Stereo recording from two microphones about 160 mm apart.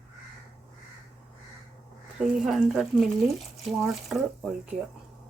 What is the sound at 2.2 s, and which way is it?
Speech, 5° right (ahead or behind).